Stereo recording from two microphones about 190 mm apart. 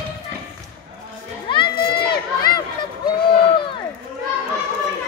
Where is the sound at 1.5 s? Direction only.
25° left (ahead or behind).